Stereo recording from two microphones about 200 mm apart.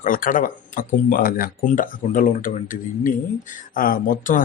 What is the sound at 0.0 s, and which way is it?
Speech, 45° left (ahead or behind).